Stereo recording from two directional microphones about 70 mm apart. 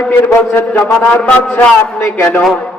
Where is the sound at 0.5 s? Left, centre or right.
Left.